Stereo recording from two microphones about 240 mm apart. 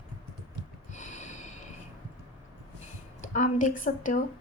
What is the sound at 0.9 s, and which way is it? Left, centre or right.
Snort, left.